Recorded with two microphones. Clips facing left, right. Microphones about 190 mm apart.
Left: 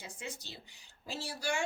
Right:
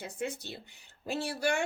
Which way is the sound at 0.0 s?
60° right (ahead or behind).